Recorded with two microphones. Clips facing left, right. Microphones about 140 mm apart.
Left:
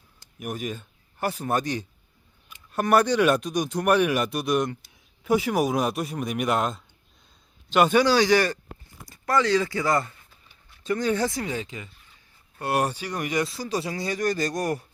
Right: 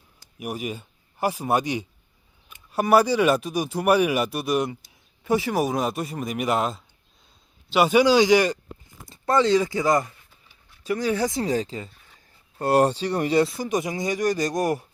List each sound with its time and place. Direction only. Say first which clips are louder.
0.3 s speech: right 1 dB; 10° right (ahead or behind)
10.8 s speech: right 1 dB; 10° right (ahead or behind)
11.4 s speech: right 6 dB; 35° right (ahead or behind); by 14.8 s 20° right (ahead or behind)